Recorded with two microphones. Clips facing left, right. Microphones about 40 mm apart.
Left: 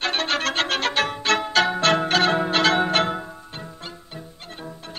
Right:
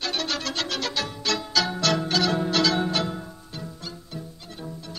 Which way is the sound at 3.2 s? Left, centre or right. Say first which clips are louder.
Left 2 dB; left.